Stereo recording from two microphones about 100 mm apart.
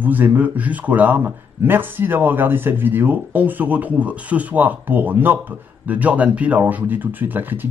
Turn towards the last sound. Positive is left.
turn(degrees=-20)  # may be behind; listen again after turning